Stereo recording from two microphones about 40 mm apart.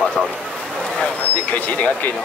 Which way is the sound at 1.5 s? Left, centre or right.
Left.